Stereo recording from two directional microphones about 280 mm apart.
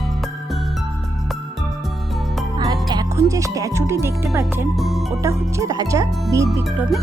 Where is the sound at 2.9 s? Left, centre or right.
Centre.